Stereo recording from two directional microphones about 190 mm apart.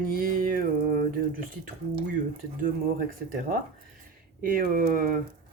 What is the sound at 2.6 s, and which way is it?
Speech, 50° right (ahead or behind).